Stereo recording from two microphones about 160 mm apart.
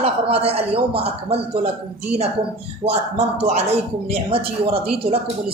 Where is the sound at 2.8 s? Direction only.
40° right (ahead or behind).